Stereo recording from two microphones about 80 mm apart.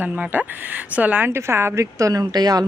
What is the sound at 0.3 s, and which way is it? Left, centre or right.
Speech, right.